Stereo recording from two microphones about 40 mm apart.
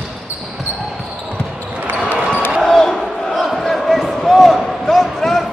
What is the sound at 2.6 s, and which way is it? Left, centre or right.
Basketball bounce, centre.